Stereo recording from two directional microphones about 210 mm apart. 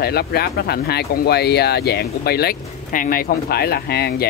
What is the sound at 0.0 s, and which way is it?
Speech, 50° left (ahead or behind).